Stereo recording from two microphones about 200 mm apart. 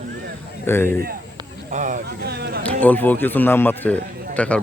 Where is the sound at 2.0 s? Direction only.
55° right (ahead or behind).